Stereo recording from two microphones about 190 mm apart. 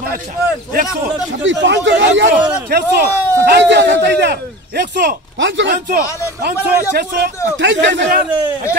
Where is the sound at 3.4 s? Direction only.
65° right (ahead or behind).